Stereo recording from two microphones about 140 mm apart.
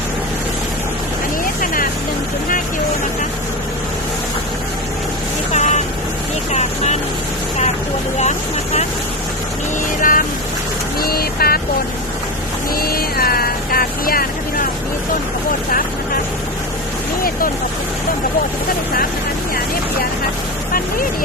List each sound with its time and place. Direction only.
5.5 s vehicle: 60° left (ahead or behind)
8.2 s vehicle: 55° left (ahead or behind)
10.0 s vehicle: 85° left
12.8 s vehicle: 90° left